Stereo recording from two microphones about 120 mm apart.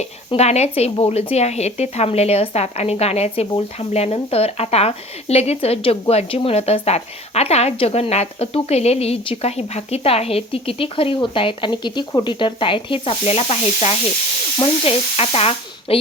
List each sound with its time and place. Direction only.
0.3 s speech: 65° left (ahead or behind)